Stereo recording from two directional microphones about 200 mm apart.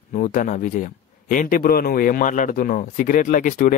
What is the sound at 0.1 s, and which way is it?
Speech, 40° left (ahead or behind).